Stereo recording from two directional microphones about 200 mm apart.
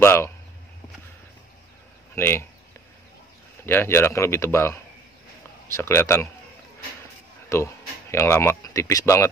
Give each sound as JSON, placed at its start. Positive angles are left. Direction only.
{"t": 0.0, "sound": "speech", "side_deg": 15}
{"t": 2.1, "sound": "speech", "side_deg": 10}
{"t": 3.6, "sound": "speech", "side_deg": 10}
{"t": 5.8, "sound": "speech", "side_deg": 10}
{"t": 7.4, "sound": "speech", "side_deg": 15}